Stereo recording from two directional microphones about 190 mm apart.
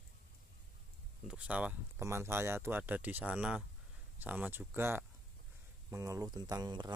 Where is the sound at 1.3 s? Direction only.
5° right (ahead or behind).